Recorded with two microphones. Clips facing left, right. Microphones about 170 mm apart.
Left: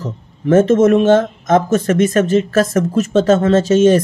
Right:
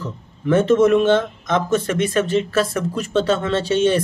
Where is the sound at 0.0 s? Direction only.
45° left (ahead or behind).